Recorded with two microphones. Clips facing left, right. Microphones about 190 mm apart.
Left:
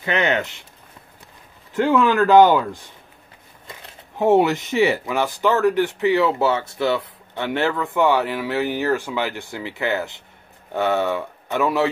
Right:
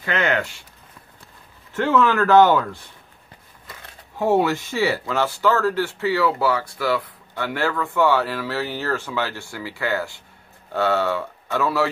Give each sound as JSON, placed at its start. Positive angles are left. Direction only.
{"t": 0.0, "sound": "speech", "side_deg": 20}
{"t": 1.7, "sound": "speech", "side_deg": 15}